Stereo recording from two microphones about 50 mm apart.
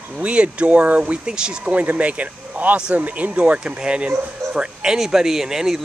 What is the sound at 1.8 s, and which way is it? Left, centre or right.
Speech, right.